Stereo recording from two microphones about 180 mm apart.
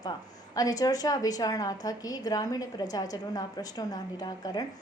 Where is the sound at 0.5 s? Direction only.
20° left (ahead or behind).